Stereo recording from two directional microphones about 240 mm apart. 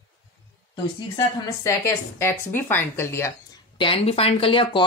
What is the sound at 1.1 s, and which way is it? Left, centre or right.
A woman's voice, centre.